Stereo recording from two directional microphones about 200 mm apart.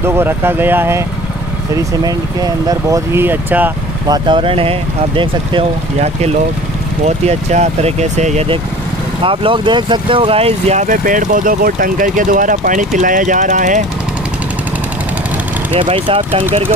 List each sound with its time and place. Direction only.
0.0 s speech: 10° right (ahead or behind)
4.3 s speech: 25° right (ahead or behind)
15.7 s speech: 25° right (ahead or behind)